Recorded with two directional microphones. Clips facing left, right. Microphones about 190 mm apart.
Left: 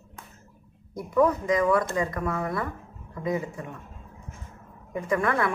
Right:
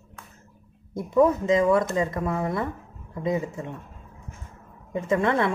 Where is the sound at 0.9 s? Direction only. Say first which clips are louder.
Right 3 dB; 25° right (ahead or behind).